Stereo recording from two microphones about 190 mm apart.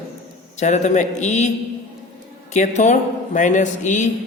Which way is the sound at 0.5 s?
35° left (ahead or behind).